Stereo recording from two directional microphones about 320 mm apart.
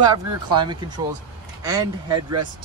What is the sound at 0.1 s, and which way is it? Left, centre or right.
Speech, centre.